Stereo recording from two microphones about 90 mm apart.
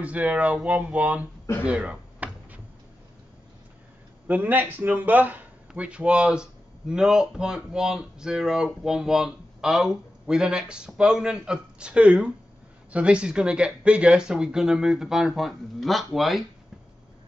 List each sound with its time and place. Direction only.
0.0 s speech: 15° right (ahead or behind)
1.6 s a sound: 15° right (ahead or behind)
4.3 s speech: 20° right (ahead or behind); by 16.4 s centre (ahead or behind)